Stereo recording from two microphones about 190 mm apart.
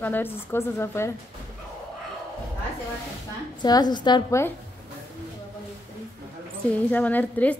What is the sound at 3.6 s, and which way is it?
Speech, 20° left (ahead or behind).